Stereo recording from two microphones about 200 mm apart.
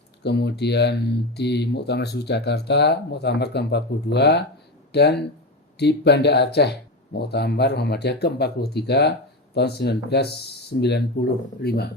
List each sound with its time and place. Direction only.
0.2 s speech: 55° left (ahead or behind)